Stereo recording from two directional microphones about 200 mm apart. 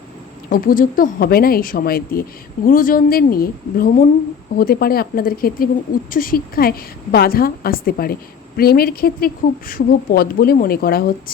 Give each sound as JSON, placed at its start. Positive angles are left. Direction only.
{"t": 0.5, "sound": "speech", "side_deg": 45}